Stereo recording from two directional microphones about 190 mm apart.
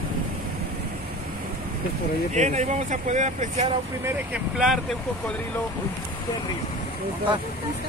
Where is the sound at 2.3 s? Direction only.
40° right (ahead or behind).